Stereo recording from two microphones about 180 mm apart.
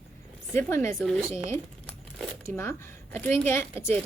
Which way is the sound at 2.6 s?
10° left (ahead or behind).